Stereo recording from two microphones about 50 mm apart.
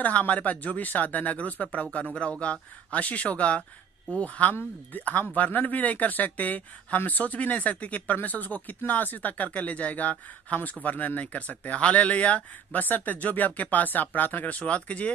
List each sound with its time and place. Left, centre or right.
0.0 s speech: left